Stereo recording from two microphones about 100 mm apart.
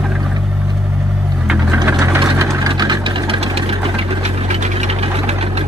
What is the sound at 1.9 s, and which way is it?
Vehicle, 25° right (ahead or behind).